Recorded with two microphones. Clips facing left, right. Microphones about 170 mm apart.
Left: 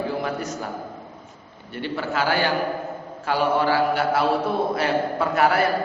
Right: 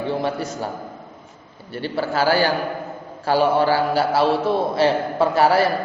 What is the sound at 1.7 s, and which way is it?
A man's voice, 35° right (ahead or behind).